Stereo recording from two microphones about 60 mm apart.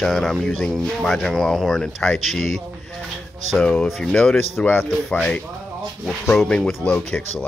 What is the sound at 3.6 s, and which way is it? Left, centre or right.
Speech, centre.